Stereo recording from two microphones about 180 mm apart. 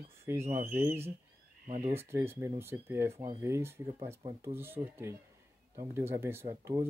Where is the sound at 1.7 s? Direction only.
40° right (ahead or behind).